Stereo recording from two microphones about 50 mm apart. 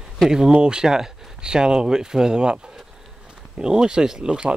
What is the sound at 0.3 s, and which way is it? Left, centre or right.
Speech, centre.